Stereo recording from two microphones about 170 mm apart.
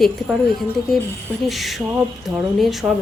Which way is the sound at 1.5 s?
Centre (ahead or behind).